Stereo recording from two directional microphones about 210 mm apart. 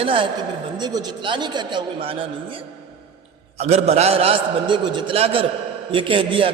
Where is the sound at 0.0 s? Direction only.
25° right (ahead or behind).